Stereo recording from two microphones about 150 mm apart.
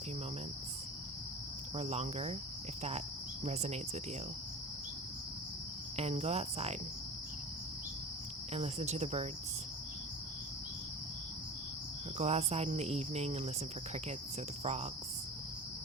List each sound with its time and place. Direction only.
1.7 s speech: 45° right (ahead or behind)
3.4 s speech: 45° right (ahead or behind)
6.0 s speech: 45° right (ahead or behind)
8.5 s speech: 45° right (ahead or behind)
12.1 s speech: 45° right (ahead or behind)
14.6 s speech: 50° right (ahead or behind)